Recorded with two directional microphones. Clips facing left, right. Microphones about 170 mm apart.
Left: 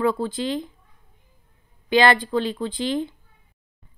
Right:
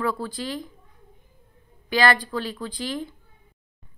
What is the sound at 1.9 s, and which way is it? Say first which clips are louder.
A woman's voice: left 4 dB; 25° left (ahead or behind).